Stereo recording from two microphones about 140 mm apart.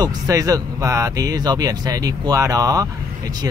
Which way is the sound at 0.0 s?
25° right (ahead or behind).